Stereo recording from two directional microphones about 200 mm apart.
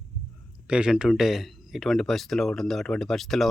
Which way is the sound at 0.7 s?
5° right (ahead or behind).